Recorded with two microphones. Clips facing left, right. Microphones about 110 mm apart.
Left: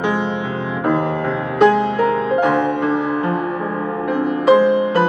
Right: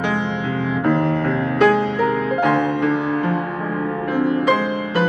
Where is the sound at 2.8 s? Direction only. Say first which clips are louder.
Left 1 dB; 40° left (ahead or behind).